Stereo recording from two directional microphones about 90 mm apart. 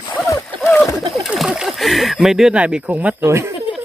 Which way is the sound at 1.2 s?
5° right (ahead or behind).